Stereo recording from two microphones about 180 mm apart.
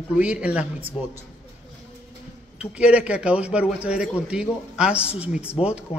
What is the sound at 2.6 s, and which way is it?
A man's voice, 5° right (ahead or behind).